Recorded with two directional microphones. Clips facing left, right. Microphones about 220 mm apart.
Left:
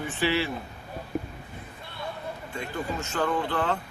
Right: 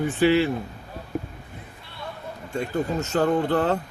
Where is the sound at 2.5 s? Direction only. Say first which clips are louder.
Right 8 dB; 40° right (ahead or behind).